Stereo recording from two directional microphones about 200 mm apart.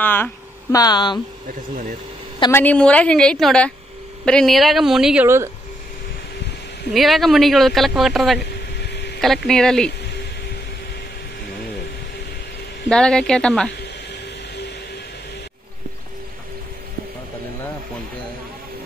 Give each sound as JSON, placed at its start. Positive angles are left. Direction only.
{"t": 0.0, "sound": "speech", "side_deg": 10}
{"t": 2.5, "sound": "speech", "side_deg": 10}
{"t": 6.9, "sound": "speech", "side_deg": 0}
{"t": 8.9, "sound": "a sound", "side_deg": 55}
{"t": 9.5, "sound": "speech", "side_deg": 5}
{"t": 12.9, "sound": "speech", "side_deg": 5}